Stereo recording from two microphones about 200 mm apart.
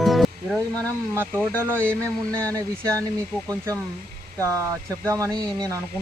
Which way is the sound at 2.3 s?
15° right (ahead or behind).